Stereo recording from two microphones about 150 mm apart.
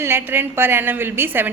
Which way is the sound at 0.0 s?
15° right (ahead or behind).